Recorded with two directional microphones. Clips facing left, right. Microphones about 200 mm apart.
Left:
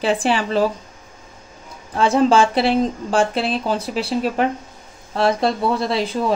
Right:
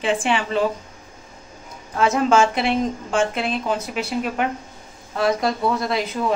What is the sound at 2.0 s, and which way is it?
Speech, 30° left (ahead or behind).